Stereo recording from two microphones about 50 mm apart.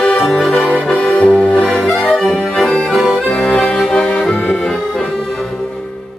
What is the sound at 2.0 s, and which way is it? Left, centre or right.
Accordion, centre.